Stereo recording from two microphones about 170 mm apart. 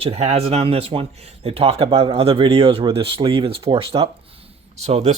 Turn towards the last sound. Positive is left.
turn(degrees=-40)  # may be behind; listen again after turning